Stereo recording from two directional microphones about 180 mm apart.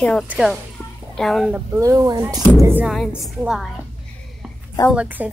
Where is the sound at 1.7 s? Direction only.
20° right (ahead or behind).